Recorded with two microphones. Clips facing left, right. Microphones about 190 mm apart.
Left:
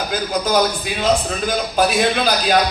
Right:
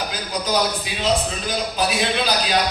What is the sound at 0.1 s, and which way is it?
A man's voice, 55° left (ahead or behind).